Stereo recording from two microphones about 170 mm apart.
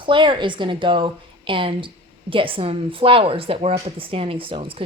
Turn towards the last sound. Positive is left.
turn(degrees=-30)  # may be behind; listen again after turning